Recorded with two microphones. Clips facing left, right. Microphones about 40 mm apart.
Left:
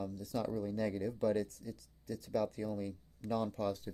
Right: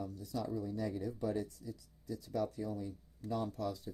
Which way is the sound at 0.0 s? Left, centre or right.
Left.